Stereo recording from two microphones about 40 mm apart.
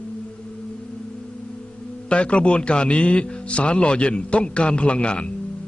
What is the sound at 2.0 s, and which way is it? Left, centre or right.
A man's voice, left.